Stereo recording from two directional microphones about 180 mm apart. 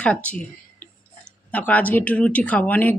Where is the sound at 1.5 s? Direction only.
10° left (ahead or behind).